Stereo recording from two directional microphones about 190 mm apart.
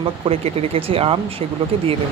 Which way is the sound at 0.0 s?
30° right (ahead or behind).